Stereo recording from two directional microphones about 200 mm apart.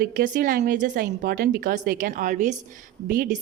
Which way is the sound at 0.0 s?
45° right (ahead or behind).